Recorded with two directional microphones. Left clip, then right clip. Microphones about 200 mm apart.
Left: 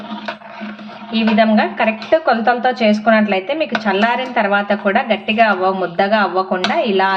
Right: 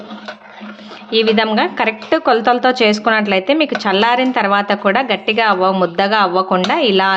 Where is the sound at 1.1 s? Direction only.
45° right (ahead or behind).